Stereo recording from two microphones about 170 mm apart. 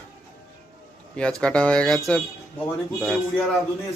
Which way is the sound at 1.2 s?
5° left (ahead or behind).